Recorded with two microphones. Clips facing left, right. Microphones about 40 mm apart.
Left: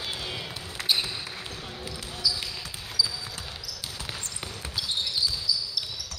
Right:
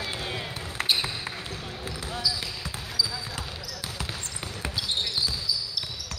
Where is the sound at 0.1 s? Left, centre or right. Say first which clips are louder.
Right 2 dB; right.